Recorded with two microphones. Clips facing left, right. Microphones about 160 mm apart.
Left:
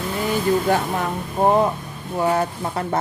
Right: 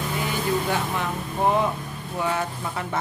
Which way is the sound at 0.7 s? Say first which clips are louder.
Left 5 dB; 40° left (ahead or behind).